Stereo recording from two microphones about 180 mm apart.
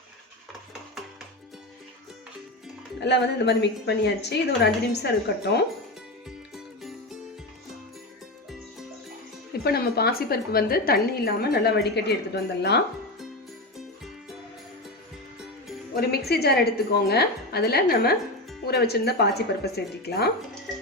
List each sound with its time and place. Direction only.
3.0 s a woman's voice: 70° left (ahead or behind)
6.2 s music: centre (ahead or behind)
9.5 s a woman's voice: 60° left (ahead or behind)
16.0 s a woman's voice: 60° left (ahead or behind)